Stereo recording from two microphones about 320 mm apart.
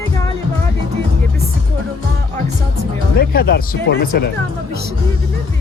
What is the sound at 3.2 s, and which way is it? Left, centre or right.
Speech, left.